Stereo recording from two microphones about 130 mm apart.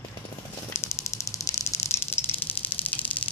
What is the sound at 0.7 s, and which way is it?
Snake, 20° left (ahead or behind).